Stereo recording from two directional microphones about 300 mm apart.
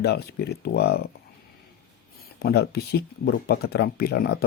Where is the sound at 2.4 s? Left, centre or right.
Left.